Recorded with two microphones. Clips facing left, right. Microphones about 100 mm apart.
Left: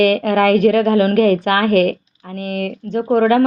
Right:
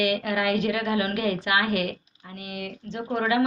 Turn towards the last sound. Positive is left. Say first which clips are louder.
# left 11 dB
turn(degrees=50)  # may be behind; listen again after turning